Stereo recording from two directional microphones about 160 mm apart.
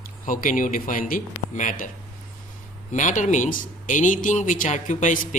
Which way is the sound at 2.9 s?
50° left (ahead or behind).